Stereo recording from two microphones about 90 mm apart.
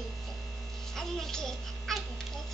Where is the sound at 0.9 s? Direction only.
5° left (ahead or behind).